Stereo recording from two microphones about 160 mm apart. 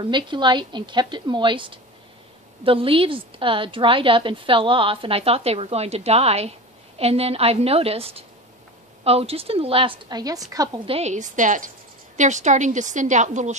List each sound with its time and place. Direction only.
0.0 s a woman's voice: 30° right (ahead or behind)
10.9 s a woman's voice: 45° right (ahead or behind)